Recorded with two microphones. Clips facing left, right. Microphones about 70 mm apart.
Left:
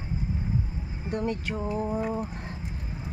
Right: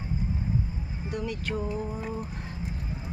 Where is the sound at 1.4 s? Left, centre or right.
Left.